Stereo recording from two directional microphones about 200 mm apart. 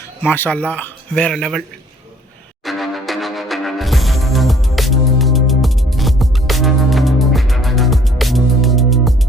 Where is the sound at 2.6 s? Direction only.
Centre (ahead or behind).